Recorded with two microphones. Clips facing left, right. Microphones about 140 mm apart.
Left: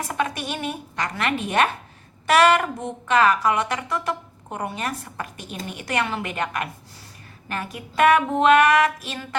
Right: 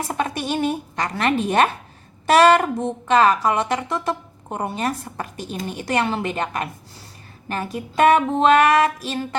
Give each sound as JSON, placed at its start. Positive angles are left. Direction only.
{"t": 0.1, "sound": "a woman's voice", "side_deg": -30}